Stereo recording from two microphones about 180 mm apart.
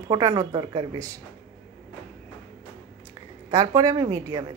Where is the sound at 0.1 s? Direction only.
20° right (ahead or behind).